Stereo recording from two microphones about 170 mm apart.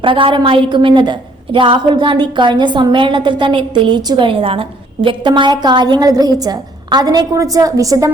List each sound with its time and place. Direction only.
0.0 s a woman's voice: 30° right (ahead or behind)